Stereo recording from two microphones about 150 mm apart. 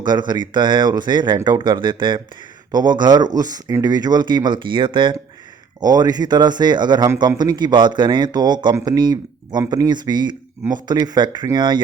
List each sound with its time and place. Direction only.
0.0 s speech: 30° right (ahead or behind)